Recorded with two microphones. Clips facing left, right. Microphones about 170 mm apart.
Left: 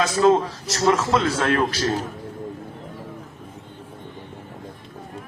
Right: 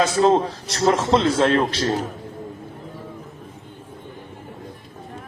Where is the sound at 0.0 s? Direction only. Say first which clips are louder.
Right 1 dB; 30° right (ahead or behind).